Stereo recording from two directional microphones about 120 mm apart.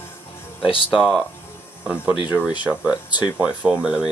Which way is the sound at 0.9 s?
Centre (ahead or behind).